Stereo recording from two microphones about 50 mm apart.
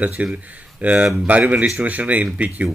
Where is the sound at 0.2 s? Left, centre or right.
Right.